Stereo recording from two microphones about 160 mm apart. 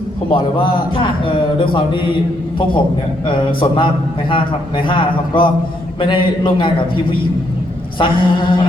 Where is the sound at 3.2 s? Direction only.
30° left (ahead or behind).